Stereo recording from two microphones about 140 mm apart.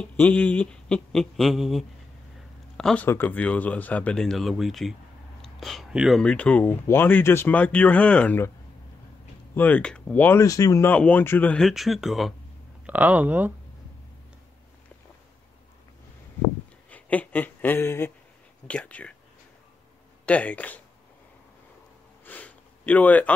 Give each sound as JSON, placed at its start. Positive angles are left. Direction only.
{"t": 0.0, "sound": "speech", "side_deg": 10}
{"t": 9.6, "sound": "speech", "side_deg": 10}
{"t": 10.4, "sound": "speech", "side_deg": 25}
{"t": 10.9, "sound": "speech", "side_deg": 10}
{"t": 11.6, "sound": "speech", "side_deg": 0}
{"t": 12.8, "sound": "speech", "side_deg": -10}
{"t": 16.9, "sound": "speech", "side_deg": 10}
{"t": 20.2, "sound": "speech", "side_deg": 10}
{"t": 22.2, "sound": "sniff", "side_deg": 10}